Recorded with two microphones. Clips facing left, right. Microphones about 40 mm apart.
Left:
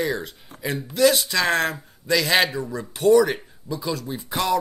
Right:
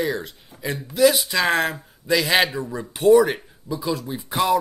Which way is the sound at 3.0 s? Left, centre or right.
Right.